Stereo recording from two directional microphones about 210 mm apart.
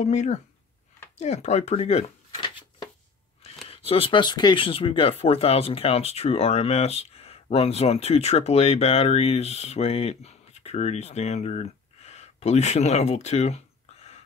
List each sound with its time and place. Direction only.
0.0 s speech: 35° left (ahead or behind)
3.6 s speech: 30° left (ahead or behind)